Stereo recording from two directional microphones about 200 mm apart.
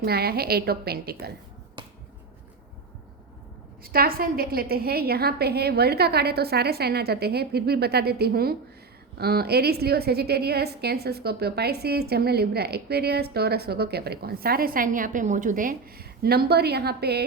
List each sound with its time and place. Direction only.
0.0 s a woman's voice: 50° right (ahead or behind)
3.8 s a woman's voice: 50° right (ahead or behind)